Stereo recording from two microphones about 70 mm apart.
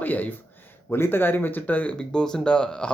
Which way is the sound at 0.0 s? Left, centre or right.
Left.